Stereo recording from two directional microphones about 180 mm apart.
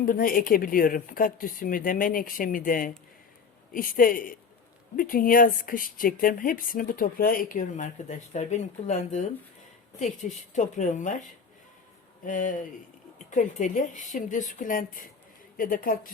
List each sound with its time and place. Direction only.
0.0 s speech: 50° left (ahead or behind)
12.2 s speech: 45° left (ahead or behind)